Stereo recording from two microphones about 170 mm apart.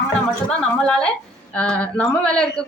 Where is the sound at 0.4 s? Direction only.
5° left (ahead or behind).